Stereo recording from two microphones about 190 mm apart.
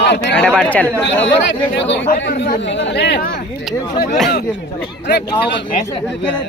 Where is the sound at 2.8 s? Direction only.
65° left (ahead or behind).